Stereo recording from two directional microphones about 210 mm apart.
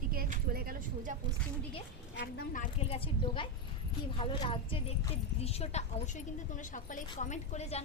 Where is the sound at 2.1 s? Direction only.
50° left (ahead or behind).